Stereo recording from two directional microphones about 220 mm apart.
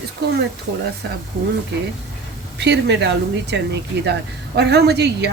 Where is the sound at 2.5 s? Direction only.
50° right (ahead or behind).